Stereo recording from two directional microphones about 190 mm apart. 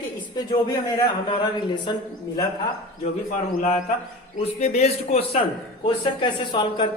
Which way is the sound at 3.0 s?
35° left (ahead or behind).